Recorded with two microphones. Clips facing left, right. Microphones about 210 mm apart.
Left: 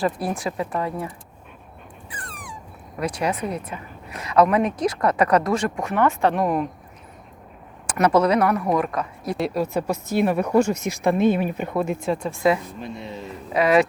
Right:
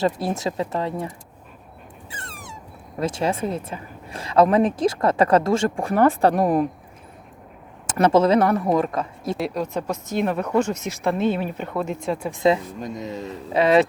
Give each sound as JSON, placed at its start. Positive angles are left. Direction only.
{"t": 0.0, "sound": "a woman's voice", "side_deg": -25}
{"t": 2.0, "sound": "dog", "side_deg": -25}
{"t": 3.0, "sound": "a woman's voice", "side_deg": -25}
{"t": 7.9, "sound": "a woman's voice", "side_deg": -25}
{"t": 9.4, "sound": "speech", "side_deg": 5}
{"t": 12.2, "sound": "a woman's voice", "side_deg": -20}
{"t": 12.8, "sound": "speech", "side_deg": -40}
{"t": 13.5, "sound": "a woman's voice", "side_deg": -25}